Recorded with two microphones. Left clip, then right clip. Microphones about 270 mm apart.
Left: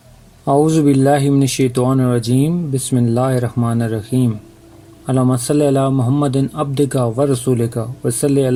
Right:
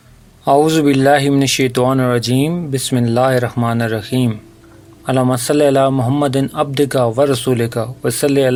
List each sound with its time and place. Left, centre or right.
0.4 s speech: right
5.0 s speech: right